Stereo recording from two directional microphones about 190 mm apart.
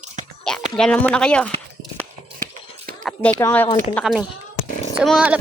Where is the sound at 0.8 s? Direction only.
5° left (ahead or behind).